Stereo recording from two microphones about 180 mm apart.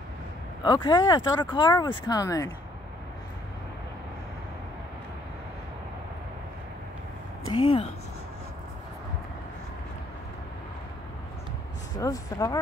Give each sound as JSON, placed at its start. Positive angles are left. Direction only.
{"t": 0.7, "sound": "speech", "side_deg": 25}
{"t": 7.4, "sound": "speech", "side_deg": 30}
{"t": 12.0, "sound": "speech", "side_deg": 20}